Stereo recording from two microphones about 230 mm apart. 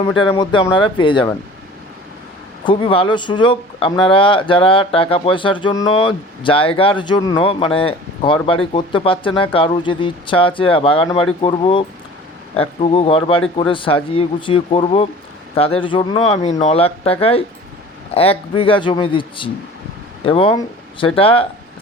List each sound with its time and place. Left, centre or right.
0.2 s speech: left
2.6 s speech: left